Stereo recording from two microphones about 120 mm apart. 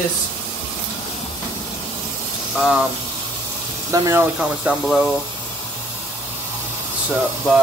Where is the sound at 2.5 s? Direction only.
5° right (ahead or behind).